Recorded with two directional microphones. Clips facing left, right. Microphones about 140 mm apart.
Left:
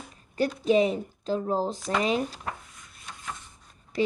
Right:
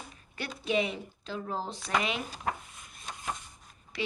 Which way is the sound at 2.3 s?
20° right (ahead or behind).